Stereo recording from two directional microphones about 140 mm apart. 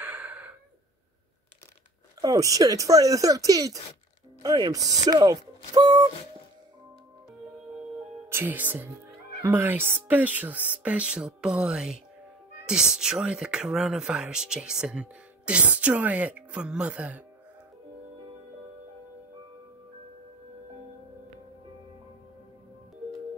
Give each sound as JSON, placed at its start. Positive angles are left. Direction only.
{"t": 0.0, "sound": "gasp", "side_deg": -15}
{"t": 2.2, "sound": "speech", "side_deg": -25}
{"t": 8.3, "sound": "speech", "side_deg": -15}